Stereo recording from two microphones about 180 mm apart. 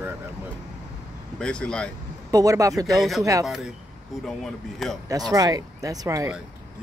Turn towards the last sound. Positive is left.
turn(degrees=-15)  # may be behind; listen again after turning